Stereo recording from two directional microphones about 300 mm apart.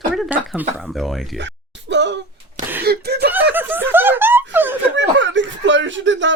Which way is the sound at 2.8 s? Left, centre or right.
Right.